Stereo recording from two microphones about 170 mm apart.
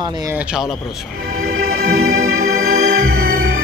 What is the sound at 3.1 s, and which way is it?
Music, 55° right (ahead or behind).